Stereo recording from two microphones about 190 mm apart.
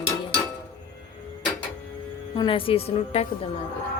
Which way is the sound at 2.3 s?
25° left (ahead or behind).